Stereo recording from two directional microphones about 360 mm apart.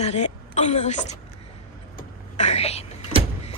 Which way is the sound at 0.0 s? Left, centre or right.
Centre.